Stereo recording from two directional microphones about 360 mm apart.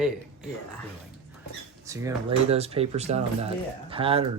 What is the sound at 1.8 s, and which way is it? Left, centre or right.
Speech, centre.